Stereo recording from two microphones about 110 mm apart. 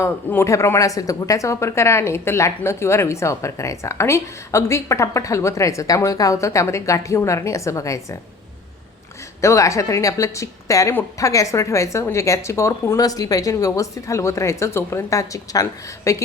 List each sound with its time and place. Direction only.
0.0 s speech: 25° left (ahead or behind)
9.4 s speech: 25° left (ahead or behind)